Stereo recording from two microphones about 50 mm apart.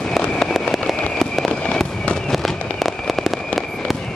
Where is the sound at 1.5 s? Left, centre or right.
Centre.